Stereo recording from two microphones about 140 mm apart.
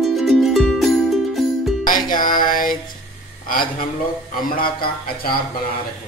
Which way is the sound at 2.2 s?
80° left.